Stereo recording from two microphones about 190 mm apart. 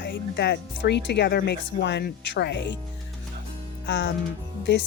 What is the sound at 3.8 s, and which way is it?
Music, 70° left (ahead or behind).